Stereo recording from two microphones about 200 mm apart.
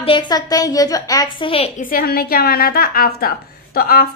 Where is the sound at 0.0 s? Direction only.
25° left (ahead or behind).